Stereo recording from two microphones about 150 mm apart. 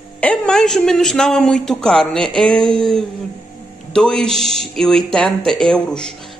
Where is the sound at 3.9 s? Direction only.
5° left (ahead or behind).